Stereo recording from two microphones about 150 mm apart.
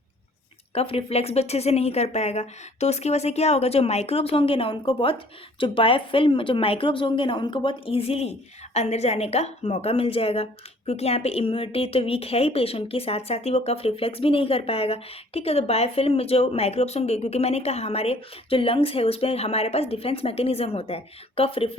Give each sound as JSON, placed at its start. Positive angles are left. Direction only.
{"t": 0.7, "sound": "speech", "side_deg": 40}